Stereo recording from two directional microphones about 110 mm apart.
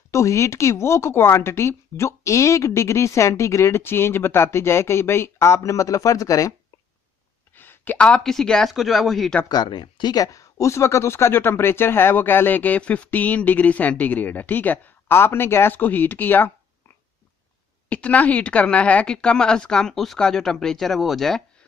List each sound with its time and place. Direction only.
0.1 s speech: 25° left (ahead or behind)
7.5 s speech: 20° left (ahead or behind); by 9.4 s centre (ahead or behind)
9.5 s speech: 40° left (ahead or behind); by 16.5 s 15° left (ahead or behind)
17.8 s speech: 15° left (ahead or behind)